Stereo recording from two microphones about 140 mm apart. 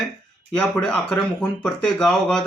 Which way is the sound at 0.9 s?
10° left (ahead or behind).